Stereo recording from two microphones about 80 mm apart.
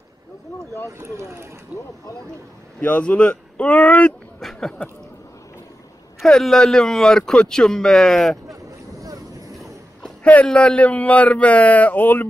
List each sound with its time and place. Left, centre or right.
0.8 s speech: right
1.7 s speech: centre
2.8 s speech: centre
4.4 s a sound: centre
6.2 s speech: centre
10.2 s speech: centre